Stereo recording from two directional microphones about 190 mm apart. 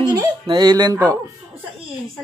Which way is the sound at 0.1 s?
20° right (ahead or behind).